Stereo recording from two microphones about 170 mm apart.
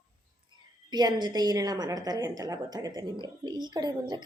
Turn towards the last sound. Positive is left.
turn(degrees=-25)  # may be behind; listen again after turning